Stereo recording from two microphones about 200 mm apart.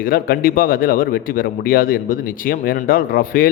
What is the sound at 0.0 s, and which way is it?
A man's voice, 45° left (ahead or behind).